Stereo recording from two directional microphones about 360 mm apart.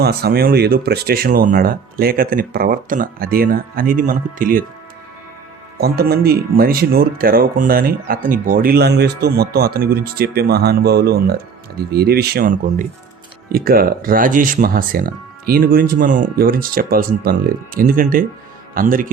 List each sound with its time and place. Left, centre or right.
0.0 s speech: right
5.7 s speech: right